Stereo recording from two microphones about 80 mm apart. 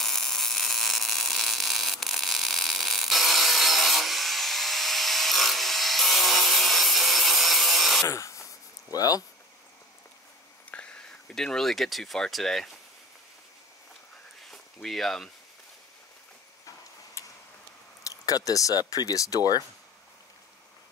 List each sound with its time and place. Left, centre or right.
0.0 s a sound: centre
8.1 s a sound: left
8.9 s speech: left
10.7 s speech: centre
14.5 s speech: centre
17.2 s tick-tock: left
18.0 s speech: left